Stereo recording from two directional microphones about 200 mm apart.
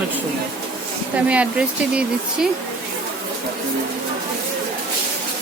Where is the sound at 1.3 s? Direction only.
5° right (ahead or behind).